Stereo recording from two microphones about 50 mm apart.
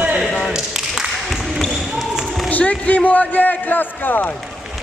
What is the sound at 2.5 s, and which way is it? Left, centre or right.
A man's voice, left.